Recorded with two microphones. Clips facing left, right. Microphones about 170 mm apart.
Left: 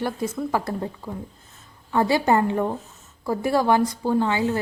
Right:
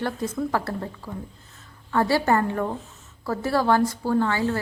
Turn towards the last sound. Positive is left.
turn(degrees=20)  # may be behind; listen again after turning